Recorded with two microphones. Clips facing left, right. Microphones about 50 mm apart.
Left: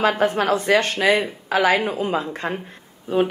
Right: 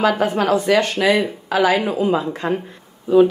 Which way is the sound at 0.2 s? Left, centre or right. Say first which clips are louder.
Right 2 dB; left.